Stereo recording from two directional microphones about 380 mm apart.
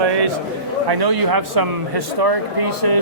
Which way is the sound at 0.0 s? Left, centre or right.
Right.